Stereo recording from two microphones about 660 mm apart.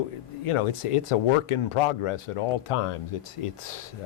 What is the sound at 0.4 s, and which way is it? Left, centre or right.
Speech, left.